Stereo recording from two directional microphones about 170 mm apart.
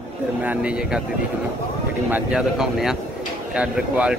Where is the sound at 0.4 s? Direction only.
10° right (ahead or behind).